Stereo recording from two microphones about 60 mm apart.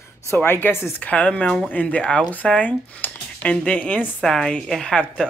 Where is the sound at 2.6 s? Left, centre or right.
Left.